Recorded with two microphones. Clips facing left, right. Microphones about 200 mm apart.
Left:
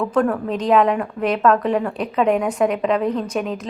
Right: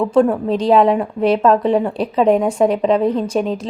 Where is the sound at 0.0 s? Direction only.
25° right (ahead or behind).